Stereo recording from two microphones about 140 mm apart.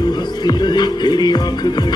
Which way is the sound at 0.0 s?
30° left (ahead or behind).